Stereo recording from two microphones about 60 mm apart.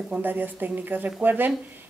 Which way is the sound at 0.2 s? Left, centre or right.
Right.